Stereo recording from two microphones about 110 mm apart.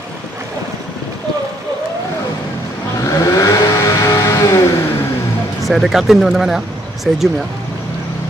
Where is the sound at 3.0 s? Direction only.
30° left (ahead or behind).